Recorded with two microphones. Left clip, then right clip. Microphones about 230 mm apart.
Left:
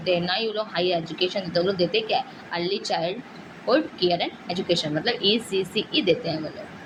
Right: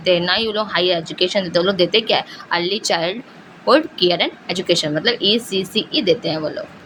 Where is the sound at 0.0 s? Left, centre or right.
Right.